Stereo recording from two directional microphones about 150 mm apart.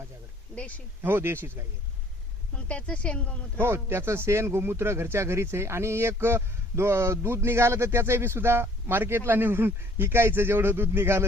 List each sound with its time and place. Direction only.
1.0 s speech: 15° right (ahead or behind)
2.6 s speech: 10° left (ahead or behind)
3.6 s speech: 15° right (ahead or behind)